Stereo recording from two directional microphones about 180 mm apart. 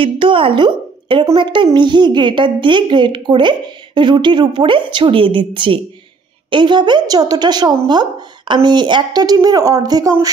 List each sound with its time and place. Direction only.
0.0 s a woman's voice: 30° right (ahead or behind)